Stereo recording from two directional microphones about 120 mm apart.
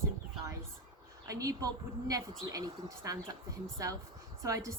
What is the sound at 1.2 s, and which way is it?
A woman's voice, 30° right (ahead or behind).